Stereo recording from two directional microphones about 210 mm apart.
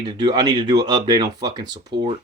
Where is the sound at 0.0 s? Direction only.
20° right (ahead or behind).